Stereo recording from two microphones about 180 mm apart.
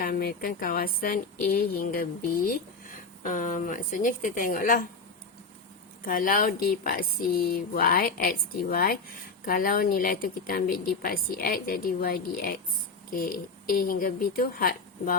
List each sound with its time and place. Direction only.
0.0 s speech: 55° left (ahead or behind)
6.1 s speech: 50° left (ahead or behind)